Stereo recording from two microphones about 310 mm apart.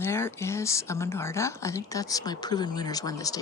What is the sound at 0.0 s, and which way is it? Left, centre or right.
Speech, centre.